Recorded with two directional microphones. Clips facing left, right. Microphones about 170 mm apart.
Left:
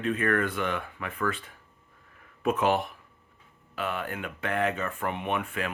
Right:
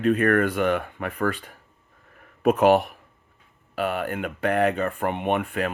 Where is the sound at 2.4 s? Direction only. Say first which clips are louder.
Right 7 dB; 55° right (ahead or behind).